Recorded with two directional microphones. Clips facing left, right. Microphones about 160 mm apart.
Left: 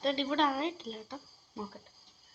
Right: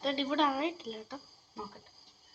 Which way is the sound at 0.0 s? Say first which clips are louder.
Left 1 dB; centre (ahead or behind).